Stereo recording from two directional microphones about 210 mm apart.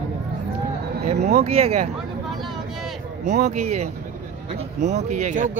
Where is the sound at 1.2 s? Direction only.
50° right (ahead or behind).